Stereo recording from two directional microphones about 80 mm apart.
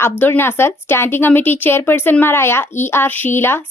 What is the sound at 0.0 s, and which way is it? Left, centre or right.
Speech, left.